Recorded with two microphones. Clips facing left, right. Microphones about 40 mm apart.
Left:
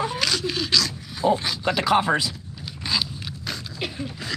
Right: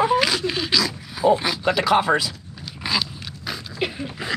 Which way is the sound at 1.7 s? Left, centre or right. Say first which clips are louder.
Right 1 dB; right.